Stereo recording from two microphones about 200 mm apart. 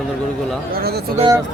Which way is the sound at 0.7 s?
50° right (ahead or behind).